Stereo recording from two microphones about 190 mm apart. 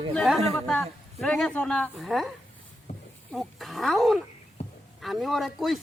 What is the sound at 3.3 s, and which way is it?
Speech, centre (ahead or behind).